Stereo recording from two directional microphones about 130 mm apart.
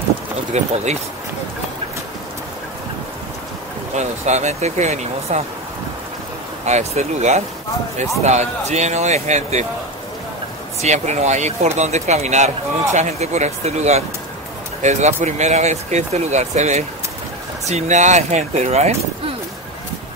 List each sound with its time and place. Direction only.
0.5 s speech: 60° right (ahead or behind)
3.9 s speech: 60° right (ahead or behind)
6.6 s speech: 60° right (ahead or behind)
10.8 s speech: 60° right (ahead or behind)